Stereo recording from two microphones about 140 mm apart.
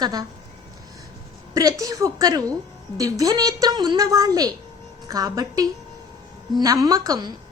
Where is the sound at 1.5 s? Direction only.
25° right (ahead or behind).